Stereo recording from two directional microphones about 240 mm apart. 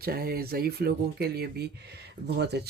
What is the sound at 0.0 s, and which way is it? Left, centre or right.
Speech, right.